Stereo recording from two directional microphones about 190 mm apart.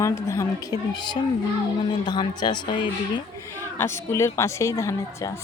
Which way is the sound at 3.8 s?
15° left (ahead or behind).